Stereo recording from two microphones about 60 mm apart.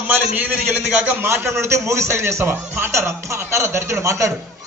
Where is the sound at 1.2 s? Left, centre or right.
Right.